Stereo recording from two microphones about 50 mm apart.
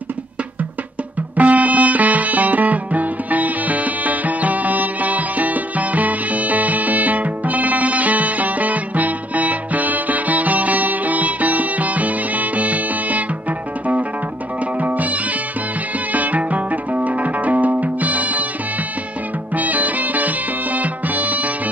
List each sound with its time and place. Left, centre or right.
1.3 s music: right
14.8 s music: right
19.5 s music: right